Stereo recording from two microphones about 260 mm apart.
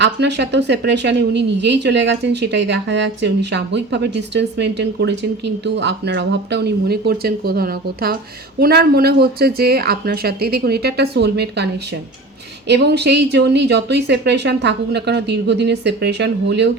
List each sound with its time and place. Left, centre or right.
0.0 s speech: right